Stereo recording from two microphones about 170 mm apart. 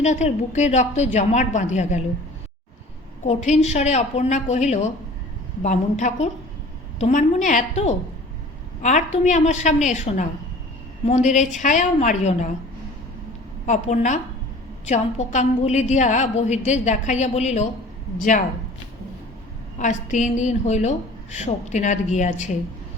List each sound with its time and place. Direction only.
0.0 s a woman's voice: 45° left (ahead or behind)
3.2 s a woman's voice: 40° left (ahead or behind)
13.7 s a woman's voice: 45° left (ahead or behind)
19.8 s a woman's voice: 45° left (ahead or behind)